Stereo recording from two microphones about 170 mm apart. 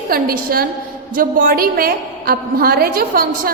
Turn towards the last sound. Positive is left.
turn(degrees=-60)  # may be behind; listen again after turning